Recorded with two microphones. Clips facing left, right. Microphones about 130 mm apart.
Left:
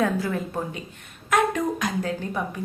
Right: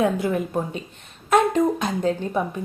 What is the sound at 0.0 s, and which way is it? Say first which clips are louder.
A woman's voice: right 3 dB; 20° right (ahead or behind).